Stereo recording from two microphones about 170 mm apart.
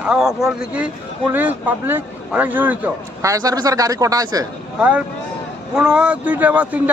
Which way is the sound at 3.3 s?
20° right (ahead or behind).